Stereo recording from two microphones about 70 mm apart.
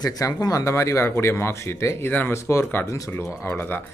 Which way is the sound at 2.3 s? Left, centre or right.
Left.